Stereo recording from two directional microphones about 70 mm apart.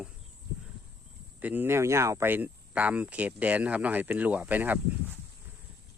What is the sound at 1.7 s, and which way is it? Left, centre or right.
Speech, right.